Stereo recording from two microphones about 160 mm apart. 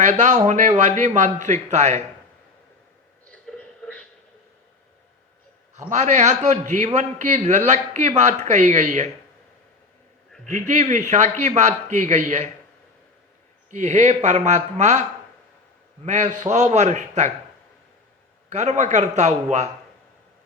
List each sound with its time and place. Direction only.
0.1 s a man's voice: 45° right (ahead or behind)
3.4 s a sound: 10° left (ahead or behind)
5.9 s a man's voice: 45° right (ahead or behind)
10.4 s a man's voice: 50° right (ahead or behind)
13.7 s a man's voice: 50° right (ahead or behind)
16.0 s a man's voice: 45° right (ahead or behind)
18.5 s a man's voice: 45° right (ahead or behind)